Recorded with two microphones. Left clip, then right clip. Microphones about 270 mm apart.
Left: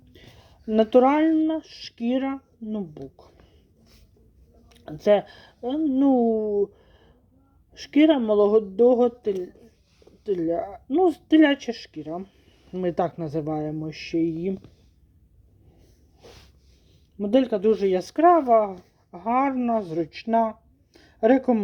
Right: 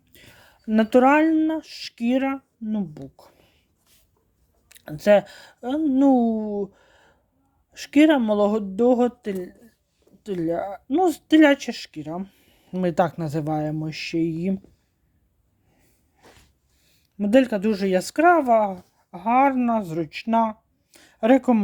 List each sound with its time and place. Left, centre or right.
0.1 s speech: right
4.7 s speech: right
17.2 s speech: right